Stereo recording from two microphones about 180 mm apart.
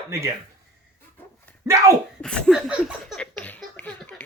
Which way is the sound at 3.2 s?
10° left (ahead or behind).